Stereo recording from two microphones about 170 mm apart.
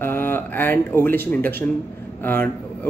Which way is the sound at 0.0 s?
15° left (ahead or behind).